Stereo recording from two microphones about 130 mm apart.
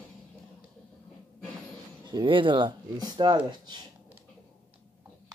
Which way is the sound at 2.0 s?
40° right (ahead or behind).